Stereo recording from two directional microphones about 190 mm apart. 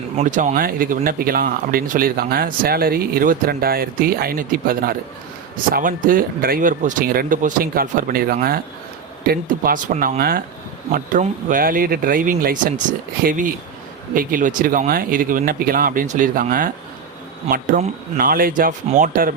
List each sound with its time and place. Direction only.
0.2 s speech: 40° right (ahead or behind)